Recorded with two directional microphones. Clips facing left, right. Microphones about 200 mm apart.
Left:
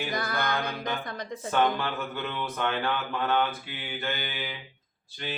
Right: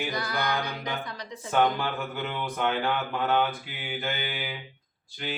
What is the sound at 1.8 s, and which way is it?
Mantra, 15° right (ahead or behind).